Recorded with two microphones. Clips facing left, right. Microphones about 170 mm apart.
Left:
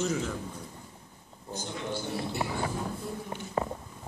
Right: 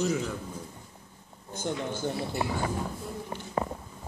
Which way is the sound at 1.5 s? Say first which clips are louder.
Right 3 dB; 50° right (ahead or behind).